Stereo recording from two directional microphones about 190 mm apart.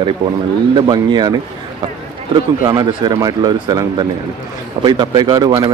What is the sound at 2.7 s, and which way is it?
Speech, 20° right (ahead or behind).